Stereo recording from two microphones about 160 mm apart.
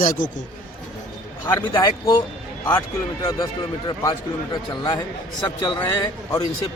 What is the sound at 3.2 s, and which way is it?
A man's voice, 20° left (ahead or behind).